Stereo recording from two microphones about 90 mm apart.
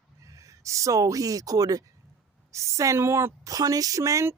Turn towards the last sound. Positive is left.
turn(degrees=-35)  # may be behind; listen again after turning